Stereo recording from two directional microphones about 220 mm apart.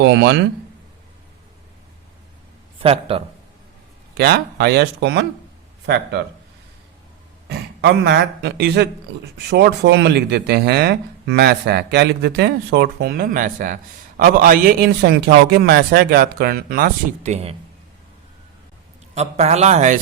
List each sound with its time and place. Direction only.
0.0 s speech: 50° right (ahead or behind)
2.8 s a man's voice: 25° right (ahead or behind)
4.2 s speech: 45° right (ahead or behind)
7.4 s speech: 45° right (ahead or behind); by 17.5 s 30° right (ahead or behind)
19.1 s a man's voice: 30° right (ahead or behind)